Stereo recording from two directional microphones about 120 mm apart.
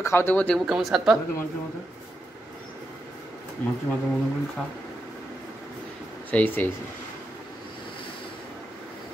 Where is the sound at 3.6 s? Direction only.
15° left (ahead or behind).